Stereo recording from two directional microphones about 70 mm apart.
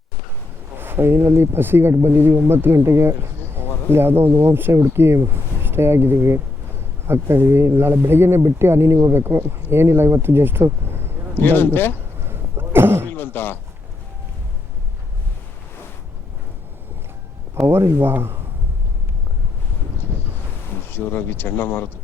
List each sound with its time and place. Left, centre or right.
0.8 s speech: right
11.3 s speech: left
12.2 s a sound: right
13.1 s a sound: left
17.6 s speech: right
20.9 s speech: left